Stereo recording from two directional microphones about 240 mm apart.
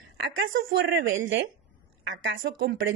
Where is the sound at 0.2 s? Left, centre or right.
Right.